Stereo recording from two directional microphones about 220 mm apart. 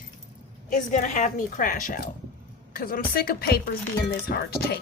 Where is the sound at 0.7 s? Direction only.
35° left (ahead or behind).